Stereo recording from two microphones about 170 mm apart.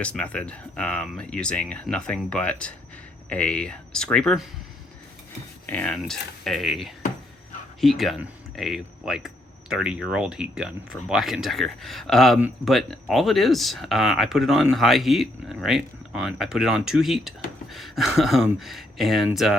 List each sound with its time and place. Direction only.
0.0 s speech: 5° left (ahead or behind)
5.6 s speech: 10° left (ahead or behind)